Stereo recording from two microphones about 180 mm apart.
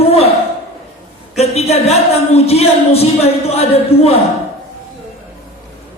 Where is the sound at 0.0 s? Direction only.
35° left (ahead or behind).